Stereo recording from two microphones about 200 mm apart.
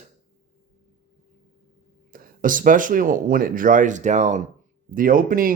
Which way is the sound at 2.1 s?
45° right (ahead or behind).